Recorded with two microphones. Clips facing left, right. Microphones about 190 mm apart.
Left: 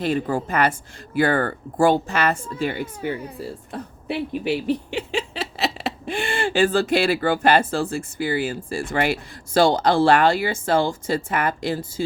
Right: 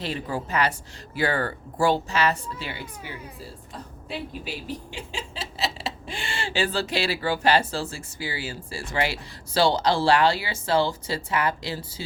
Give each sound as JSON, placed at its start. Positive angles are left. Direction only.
{"t": 0.0, "sound": "speech", "side_deg": 50}
{"t": 3.7, "sound": "speech", "side_deg": 65}